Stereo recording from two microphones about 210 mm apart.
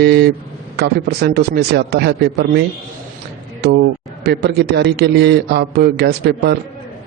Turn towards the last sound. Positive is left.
turn(degrees=-50)  # may be behind; listen again after turning